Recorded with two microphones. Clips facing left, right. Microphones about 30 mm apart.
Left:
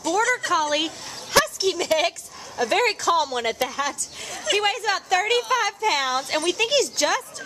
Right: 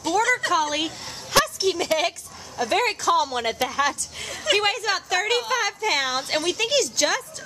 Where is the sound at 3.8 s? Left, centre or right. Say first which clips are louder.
Right 3 dB; centre.